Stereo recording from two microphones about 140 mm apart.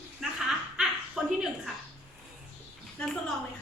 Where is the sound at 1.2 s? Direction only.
5° right (ahead or behind).